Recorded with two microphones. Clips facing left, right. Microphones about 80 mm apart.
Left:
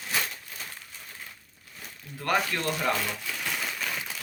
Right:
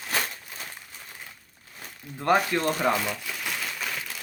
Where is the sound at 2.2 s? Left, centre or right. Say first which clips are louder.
Right 5 dB; right.